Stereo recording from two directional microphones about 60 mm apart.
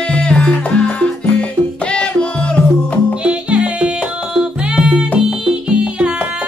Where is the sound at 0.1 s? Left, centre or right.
Centre.